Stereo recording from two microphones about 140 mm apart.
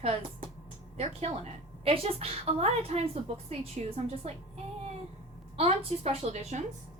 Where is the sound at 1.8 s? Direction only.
45° right (ahead or behind).